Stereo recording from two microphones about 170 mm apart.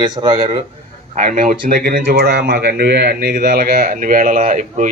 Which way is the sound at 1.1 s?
50° right (ahead or behind).